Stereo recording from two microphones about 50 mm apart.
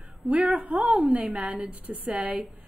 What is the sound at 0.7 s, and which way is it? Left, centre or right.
Speech, right.